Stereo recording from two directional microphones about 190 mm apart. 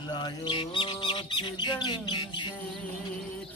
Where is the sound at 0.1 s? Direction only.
25° left (ahead or behind).